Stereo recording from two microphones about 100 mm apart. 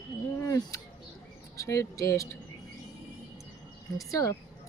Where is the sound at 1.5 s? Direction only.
30° left (ahead or behind).